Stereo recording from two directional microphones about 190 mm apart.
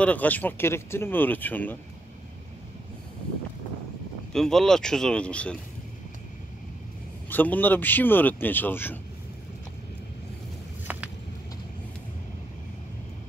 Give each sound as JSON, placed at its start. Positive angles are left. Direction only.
{"t": 0.0, "sound": "speech", "side_deg": 10}
{"t": 4.3, "sound": "speech", "side_deg": 0}
{"t": 7.2, "sound": "speech", "side_deg": 10}
{"t": 10.9, "sound": "vehicle", "side_deg": -10}